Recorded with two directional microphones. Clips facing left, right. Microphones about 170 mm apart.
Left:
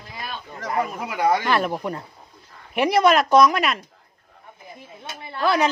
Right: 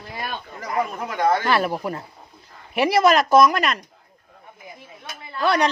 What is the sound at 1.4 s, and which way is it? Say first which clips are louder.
Speech: right 1 dB; 5° right (ahead or behind).